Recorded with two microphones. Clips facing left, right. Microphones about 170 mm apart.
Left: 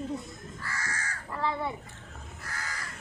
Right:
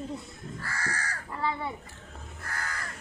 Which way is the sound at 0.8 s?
35° right (ahead or behind).